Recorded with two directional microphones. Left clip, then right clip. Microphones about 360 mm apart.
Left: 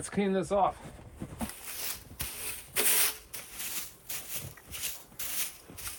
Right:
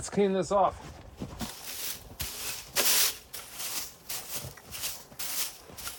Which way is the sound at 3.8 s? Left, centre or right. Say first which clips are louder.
Right 3 dB; centre.